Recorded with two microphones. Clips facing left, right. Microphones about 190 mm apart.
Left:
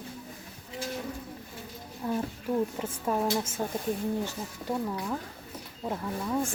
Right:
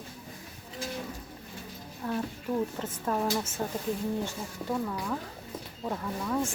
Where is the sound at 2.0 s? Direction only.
10° left (ahead or behind).